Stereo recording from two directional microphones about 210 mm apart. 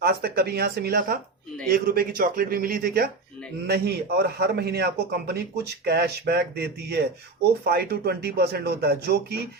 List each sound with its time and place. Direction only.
0.0 s speech: 45° right (ahead or behind)